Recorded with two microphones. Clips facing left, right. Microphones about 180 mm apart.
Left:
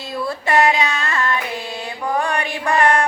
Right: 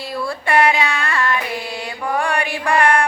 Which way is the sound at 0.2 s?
20° left (ahead or behind).